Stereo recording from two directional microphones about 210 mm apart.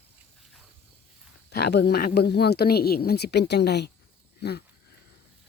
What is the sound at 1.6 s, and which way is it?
Speech, 50° left (ahead or behind).